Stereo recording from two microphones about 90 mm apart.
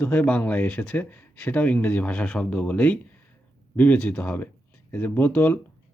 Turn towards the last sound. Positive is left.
turn(degrees=20)  # may be behind; listen again after turning